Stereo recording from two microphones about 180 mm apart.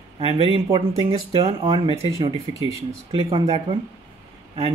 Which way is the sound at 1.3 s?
35° right (ahead or behind).